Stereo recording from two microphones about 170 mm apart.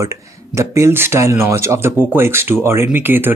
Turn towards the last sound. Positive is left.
turn(degrees=-10)  # may be behind; listen again after turning